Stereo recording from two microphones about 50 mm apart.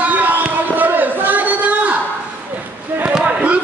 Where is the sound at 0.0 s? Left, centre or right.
Right.